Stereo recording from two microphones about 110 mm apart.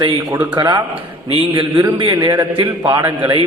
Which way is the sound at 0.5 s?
40° right (ahead or behind).